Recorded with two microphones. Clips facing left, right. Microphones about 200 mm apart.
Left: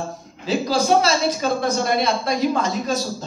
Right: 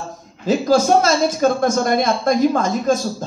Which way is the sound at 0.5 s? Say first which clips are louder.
Right 4 dB; 50° right (ahead or behind).